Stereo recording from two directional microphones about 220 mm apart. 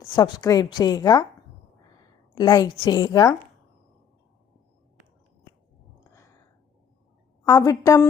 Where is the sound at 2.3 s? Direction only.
20° left (ahead or behind).